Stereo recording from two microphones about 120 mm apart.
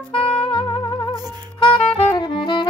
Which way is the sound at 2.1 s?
40° left (ahead or behind).